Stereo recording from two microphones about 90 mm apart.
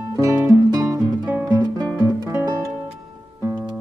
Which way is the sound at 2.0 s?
35° right (ahead or behind).